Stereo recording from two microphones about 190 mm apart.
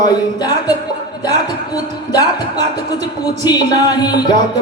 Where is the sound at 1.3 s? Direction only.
20° left (ahead or behind).